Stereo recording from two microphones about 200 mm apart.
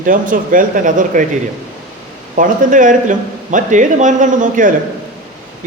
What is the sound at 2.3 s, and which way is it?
Speech, 40° right (ahead or behind).